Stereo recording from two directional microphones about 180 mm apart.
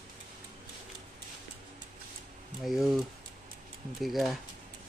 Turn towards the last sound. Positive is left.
turn(degrees=0)  # may be behind; listen again after turning